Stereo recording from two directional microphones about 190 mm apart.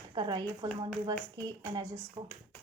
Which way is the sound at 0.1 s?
25° right (ahead or behind).